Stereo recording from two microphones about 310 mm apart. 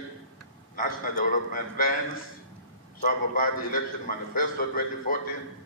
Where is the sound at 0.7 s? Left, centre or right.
Left.